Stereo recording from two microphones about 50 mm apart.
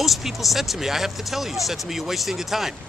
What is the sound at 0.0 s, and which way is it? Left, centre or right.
Speech, centre.